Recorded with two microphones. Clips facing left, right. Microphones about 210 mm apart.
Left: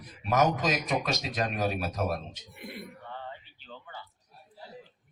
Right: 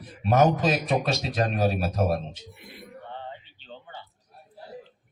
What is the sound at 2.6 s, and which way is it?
Speech, 55° left (ahead or behind).